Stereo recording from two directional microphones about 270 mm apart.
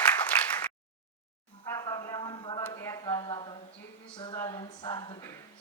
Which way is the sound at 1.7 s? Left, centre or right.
Centre.